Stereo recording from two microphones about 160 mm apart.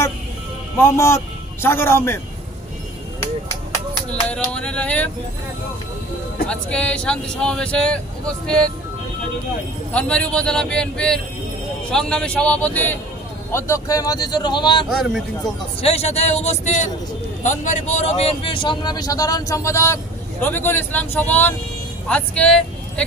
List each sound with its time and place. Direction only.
0.7 s a man's voice: 15° left (ahead or behind)
4.1 s speech: 5° left (ahead or behind)
6.5 s speech: 5° left (ahead or behind)
9.9 s a man's voice: 5° left (ahead or behind); by 14.9 s 30° left (ahead or behind)
14.9 s a man's voice: centre (ahead or behind)
15.8 s a man's voice: 40° left (ahead or behind); by 23.0 s 5° left (ahead or behind)